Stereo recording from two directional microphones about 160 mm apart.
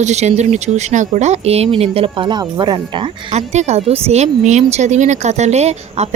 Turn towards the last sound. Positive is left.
turn(degrees=-45)  # may be behind; listen again after turning